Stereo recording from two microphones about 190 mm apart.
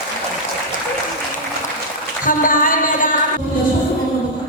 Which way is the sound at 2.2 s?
45° left (ahead or behind).